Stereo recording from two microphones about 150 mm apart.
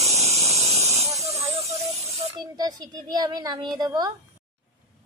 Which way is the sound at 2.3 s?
25° right (ahead or behind).